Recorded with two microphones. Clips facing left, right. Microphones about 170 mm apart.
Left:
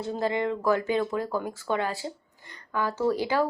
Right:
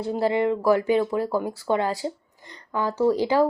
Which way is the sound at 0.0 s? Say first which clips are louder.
Right 5 dB; 15° right (ahead or behind).